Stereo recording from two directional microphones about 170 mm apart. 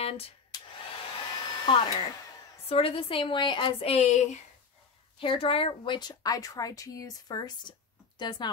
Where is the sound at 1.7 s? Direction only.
30° left (ahead or behind).